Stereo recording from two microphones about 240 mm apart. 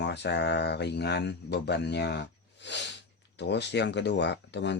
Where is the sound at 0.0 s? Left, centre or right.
Left.